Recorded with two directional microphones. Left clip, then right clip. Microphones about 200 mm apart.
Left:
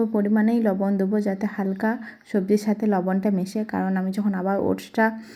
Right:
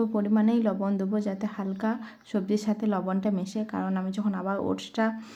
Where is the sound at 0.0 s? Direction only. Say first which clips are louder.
Left 5 dB; 20° left (ahead or behind).